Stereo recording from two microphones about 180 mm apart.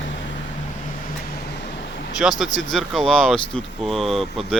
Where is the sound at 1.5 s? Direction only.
65° left (ahead or behind).